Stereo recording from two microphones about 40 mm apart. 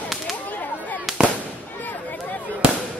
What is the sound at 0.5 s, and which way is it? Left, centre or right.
Whip, left.